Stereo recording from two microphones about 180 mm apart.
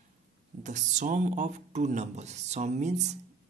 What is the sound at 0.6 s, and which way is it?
Speech, 40° right (ahead or behind).